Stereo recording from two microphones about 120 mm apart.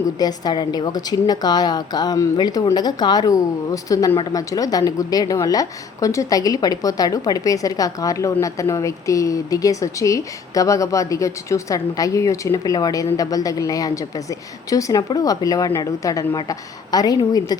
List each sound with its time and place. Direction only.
0.2 s a woman's voice: 35° left (ahead or behind)